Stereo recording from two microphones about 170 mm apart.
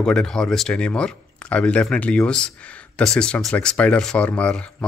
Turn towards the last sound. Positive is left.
turn(degrees=5)  # may be behind; listen again after turning